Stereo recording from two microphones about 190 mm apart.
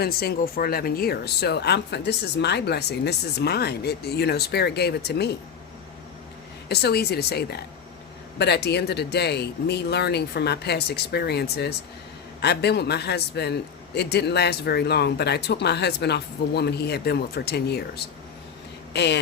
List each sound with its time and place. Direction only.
0.0 s a man's voice: 55° left (ahead or behind)
6.7 s a man's voice: 55° left (ahead or behind)